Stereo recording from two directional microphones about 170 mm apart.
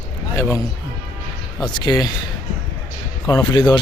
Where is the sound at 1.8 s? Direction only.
25° left (ahead or behind).